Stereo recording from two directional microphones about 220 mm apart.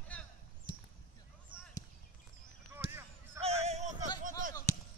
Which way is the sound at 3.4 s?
30° right (ahead or behind).